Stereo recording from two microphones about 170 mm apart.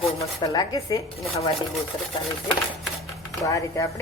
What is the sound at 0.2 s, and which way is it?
Speech, 20° left (ahead or behind).